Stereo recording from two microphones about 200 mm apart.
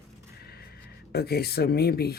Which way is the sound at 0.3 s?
50° left (ahead or behind).